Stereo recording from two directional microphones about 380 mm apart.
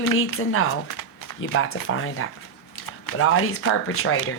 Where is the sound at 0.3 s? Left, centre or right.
Left.